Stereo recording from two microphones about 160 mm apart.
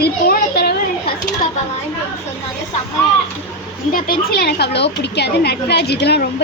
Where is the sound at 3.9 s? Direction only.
60° left (ahead or behind).